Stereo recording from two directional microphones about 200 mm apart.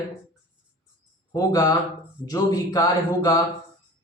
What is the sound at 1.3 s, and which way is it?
Speech, 20° left (ahead or behind).